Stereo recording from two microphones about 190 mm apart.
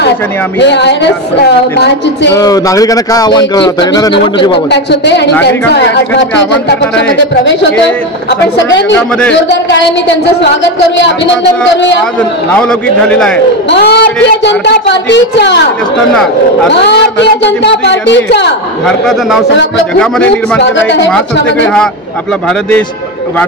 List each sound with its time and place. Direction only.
0.6 s a woman's voice: 65° left (ahead or behind)
2.3 s speech: 20° left (ahead or behind)
4.6 s a woman's voice: 65° left (ahead or behind)
9.3 s a man's voice: 70° left (ahead or behind)
12.5 s a man's voice: 5° left (ahead or behind)
13.7 s a woman's voice: 60° left (ahead or behind)
16.8 s a man's voice: 65° left (ahead or behind)
18.9 s a man's voice: centre (ahead or behind)
20.6 s a man's voice: 70° left (ahead or behind)